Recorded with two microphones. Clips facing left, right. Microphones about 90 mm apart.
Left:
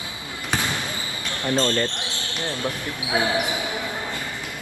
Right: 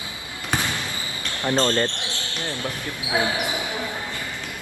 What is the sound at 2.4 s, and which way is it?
Speech, 20° left (ahead or behind).